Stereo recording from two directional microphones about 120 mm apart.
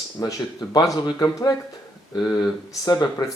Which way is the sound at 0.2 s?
35° left (ahead or behind).